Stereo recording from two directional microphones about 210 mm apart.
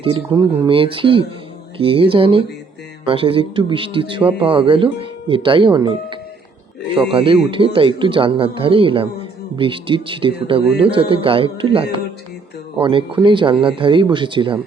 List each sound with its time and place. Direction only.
0.0 s speech: 25° right (ahead or behind)